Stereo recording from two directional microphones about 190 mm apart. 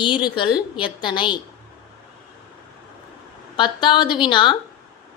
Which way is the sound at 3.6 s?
25° left (ahead or behind).